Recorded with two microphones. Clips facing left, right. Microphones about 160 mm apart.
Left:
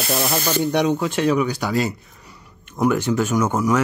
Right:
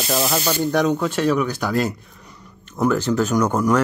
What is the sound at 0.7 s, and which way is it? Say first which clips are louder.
Speech: right 1 dB; 10° left (ahead or behind).